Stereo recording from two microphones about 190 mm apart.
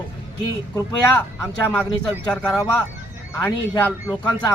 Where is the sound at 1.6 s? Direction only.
5° left (ahead or behind).